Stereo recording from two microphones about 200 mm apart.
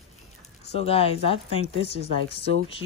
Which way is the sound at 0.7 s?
30° left (ahead or behind).